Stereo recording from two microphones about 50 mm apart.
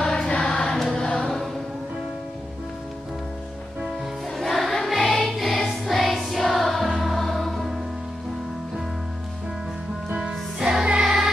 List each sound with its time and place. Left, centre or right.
0.0 s music: centre
0.7 s choir: centre
1.0 s choir: centre
4.4 s music: centre
10.1 s music: centre
10.9 s choir: centre